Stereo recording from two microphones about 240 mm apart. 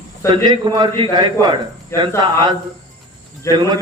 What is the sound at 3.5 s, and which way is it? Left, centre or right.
Speech, centre.